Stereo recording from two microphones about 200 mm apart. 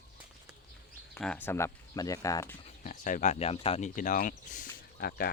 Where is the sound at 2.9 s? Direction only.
40° left (ahead or behind).